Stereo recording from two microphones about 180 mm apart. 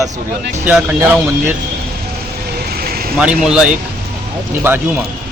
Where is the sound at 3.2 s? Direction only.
5° right (ahead or behind).